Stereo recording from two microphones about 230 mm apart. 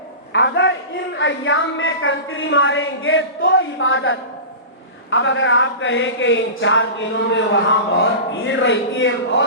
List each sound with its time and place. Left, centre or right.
0.3 s a woman's voice: left